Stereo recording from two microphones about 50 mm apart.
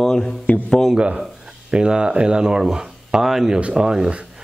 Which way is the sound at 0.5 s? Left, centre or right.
Left.